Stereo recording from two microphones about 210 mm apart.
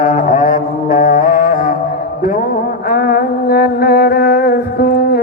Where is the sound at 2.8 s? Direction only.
45° left (ahead or behind).